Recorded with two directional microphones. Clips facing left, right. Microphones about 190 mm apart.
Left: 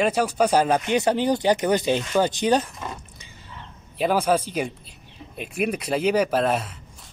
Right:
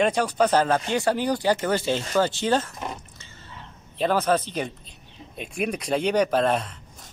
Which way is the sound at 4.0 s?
10° left (ahead or behind).